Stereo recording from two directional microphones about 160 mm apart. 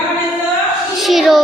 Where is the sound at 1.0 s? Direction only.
Centre (ahead or behind).